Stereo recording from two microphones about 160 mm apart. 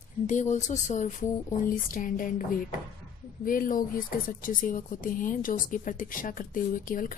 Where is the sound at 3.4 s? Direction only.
60° left (ahead or behind).